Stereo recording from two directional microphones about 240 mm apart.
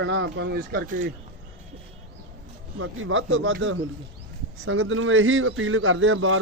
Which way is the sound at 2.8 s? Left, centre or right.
Right.